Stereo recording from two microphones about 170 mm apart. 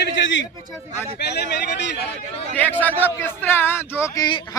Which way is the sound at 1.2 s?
75° left (ahead or behind).